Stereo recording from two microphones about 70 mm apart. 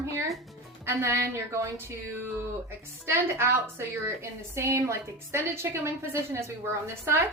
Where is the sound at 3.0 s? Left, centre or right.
Right.